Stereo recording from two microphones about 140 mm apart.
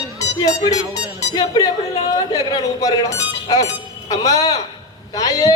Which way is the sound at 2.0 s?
25° left (ahead or behind).